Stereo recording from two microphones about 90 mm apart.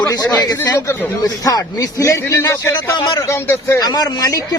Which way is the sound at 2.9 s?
50° left (ahead or behind).